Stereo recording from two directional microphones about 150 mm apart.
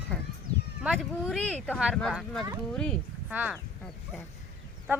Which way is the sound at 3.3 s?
10° right (ahead or behind).